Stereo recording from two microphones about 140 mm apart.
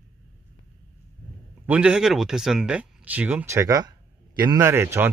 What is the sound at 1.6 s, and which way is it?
Speech, 10° right (ahead or behind).